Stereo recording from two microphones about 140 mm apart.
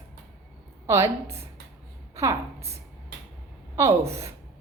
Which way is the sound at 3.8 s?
20° right (ahead or behind).